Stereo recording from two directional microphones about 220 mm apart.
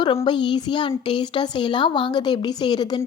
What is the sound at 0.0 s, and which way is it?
A child's voice, 20° left (ahead or behind).